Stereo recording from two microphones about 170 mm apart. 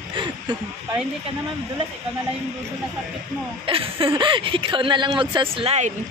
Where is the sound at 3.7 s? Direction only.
30° right (ahead or behind).